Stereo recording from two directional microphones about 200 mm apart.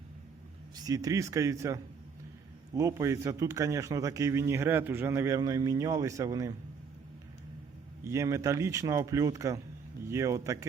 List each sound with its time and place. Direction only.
0.8 s speech: 15° right (ahead or behind)
8.0 s speech: 15° right (ahead or behind)